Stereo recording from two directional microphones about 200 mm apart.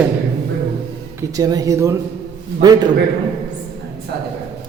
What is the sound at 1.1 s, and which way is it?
A man's voice, 15° right (ahead or behind).